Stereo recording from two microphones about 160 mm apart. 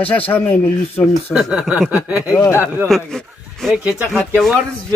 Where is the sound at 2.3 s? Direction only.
20° left (ahead or behind).